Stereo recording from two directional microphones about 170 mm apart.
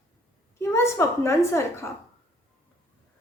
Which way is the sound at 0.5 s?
15° left (ahead or behind).